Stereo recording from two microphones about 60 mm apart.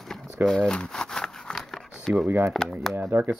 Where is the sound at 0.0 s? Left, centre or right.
Centre.